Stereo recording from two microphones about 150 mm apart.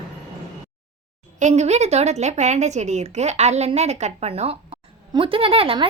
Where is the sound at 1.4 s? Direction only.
50° right (ahead or behind).